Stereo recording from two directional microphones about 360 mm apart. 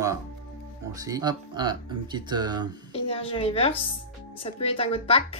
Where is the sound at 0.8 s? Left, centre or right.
Centre.